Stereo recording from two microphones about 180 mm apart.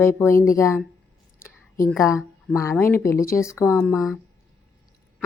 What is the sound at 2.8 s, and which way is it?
Speech, 10° left (ahead or behind).